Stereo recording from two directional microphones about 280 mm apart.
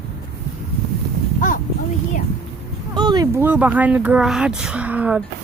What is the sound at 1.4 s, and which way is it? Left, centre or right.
Speech, left.